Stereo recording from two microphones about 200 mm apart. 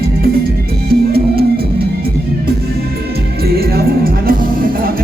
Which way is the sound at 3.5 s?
50° right (ahead or behind).